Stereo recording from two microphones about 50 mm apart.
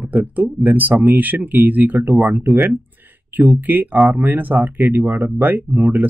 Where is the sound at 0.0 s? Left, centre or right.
Right.